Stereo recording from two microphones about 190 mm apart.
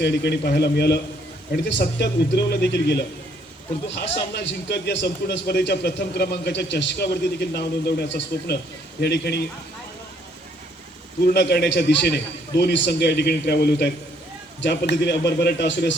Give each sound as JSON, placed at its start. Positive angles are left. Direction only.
{"t": 0.0, "sound": "a man's voice", "side_deg": 60}
{"t": 11.3, "sound": "a man's voice", "side_deg": 60}